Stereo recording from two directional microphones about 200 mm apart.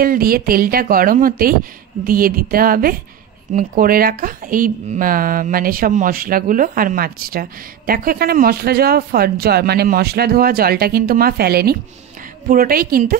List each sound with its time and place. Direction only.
0.0 s speech: 45° right (ahead or behind)